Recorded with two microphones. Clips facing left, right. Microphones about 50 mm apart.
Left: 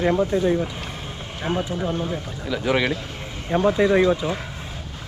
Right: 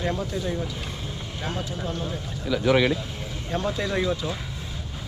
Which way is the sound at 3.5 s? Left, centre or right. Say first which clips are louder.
Left 9 dB; left.